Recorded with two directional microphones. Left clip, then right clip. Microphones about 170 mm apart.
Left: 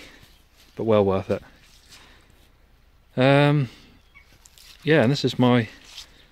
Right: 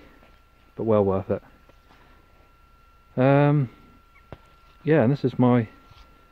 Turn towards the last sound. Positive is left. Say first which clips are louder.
# left 2 dB
turn(degrees=10)  # may be behind; listen again after turning